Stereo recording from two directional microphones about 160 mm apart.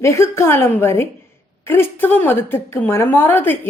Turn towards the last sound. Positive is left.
turn(degrees=15)  # may be behind; listen again after turning